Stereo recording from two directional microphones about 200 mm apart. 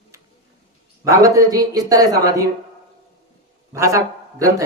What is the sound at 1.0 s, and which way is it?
A woman's voice, 15° right (ahead or behind).